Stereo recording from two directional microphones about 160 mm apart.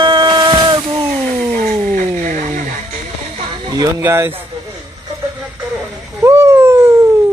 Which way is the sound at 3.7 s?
15° right (ahead or behind).